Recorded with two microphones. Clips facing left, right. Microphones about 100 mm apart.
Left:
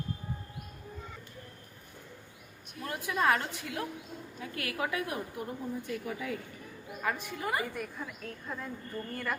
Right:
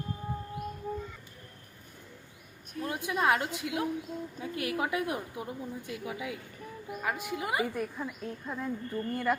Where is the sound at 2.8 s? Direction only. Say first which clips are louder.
Right 1 dB; 20° right (ahead or behind).